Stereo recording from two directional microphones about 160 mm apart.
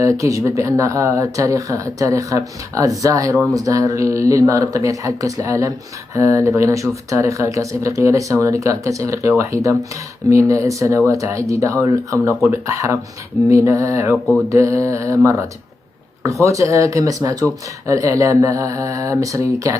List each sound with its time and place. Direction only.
0.0 s speech: 20° right (ahead or behind)